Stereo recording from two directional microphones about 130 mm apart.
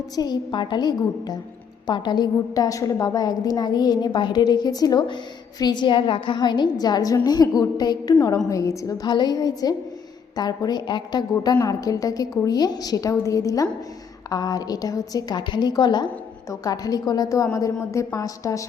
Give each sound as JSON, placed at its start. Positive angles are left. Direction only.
{"t": 0.2, "sound": "a woman's voice", "side_deg": 35}